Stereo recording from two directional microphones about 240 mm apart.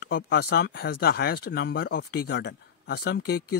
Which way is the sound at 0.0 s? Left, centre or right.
Left.